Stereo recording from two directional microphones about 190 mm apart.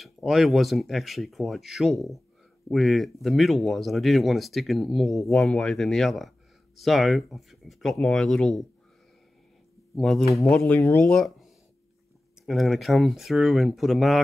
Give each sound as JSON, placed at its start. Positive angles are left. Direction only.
{"t": 0.0, "sound": "speech", "side_deg": 0}
{"t": 9.9, "sound": "speech", "side_deg": 0}
{"t": 10.6, "sound": "speech", "side_deg": 15}